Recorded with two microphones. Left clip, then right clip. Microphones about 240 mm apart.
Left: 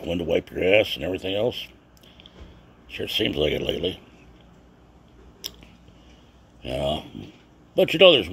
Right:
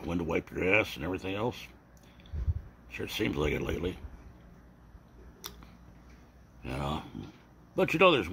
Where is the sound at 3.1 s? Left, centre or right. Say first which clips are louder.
Left 8 dB; left.